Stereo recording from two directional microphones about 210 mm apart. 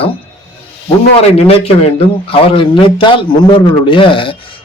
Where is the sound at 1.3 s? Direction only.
30° left (ahead or behind).